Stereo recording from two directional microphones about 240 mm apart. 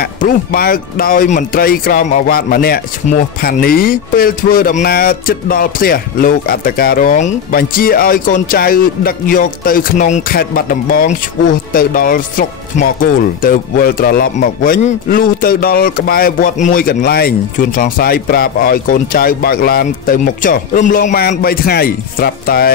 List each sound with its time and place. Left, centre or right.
0.0 s speech: left